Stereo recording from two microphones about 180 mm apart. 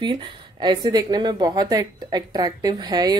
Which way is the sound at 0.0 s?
25° right (ahead or behind).